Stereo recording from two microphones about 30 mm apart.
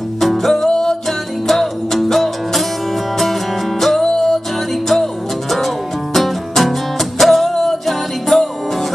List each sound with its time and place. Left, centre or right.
0.2 s music: centre
0.7 s music: centre
1.0 s music: centre